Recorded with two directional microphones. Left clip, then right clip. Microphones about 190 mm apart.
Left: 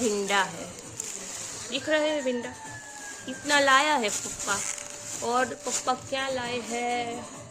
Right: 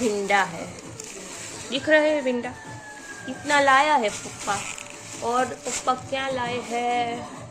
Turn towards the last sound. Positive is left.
turn(degrees=15)  # may be behind; listen again after turning